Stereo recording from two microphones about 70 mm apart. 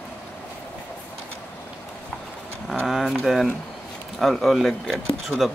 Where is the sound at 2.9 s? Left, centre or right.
Centre.